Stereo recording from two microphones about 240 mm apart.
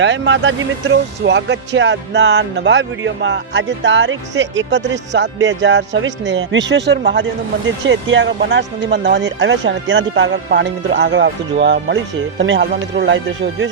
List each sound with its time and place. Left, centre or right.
0.0 s speech: right